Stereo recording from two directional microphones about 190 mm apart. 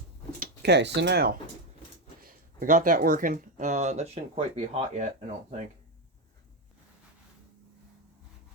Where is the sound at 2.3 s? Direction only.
45° right (ahead or behind).